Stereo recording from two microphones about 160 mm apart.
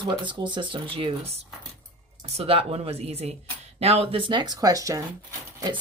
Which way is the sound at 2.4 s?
35° right (ahead or behind).